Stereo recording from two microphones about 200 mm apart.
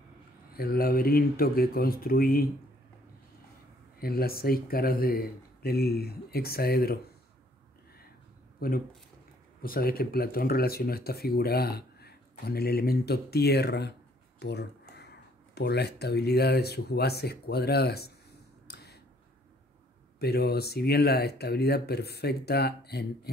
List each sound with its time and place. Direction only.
0.6 s speech: 50° left (ahead or behind)
4.0 s speech: 50° left (ahead or behind)
8.5 s speech: 45° left (ahead or behind)
18.7 s a sound: 55° left (ahead or behind)
20.2 s speech: 50° left (ahead or behind)